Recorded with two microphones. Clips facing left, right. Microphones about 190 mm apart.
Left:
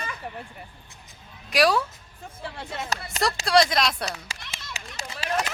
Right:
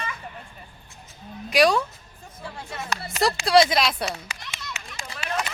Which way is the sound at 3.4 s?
Centre (ahead or behind).